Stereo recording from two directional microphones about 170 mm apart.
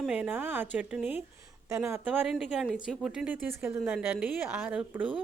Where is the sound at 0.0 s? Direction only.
10° right (ahead or behind).